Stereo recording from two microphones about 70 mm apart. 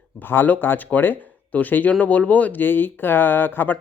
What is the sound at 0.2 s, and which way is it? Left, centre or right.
Speech, left.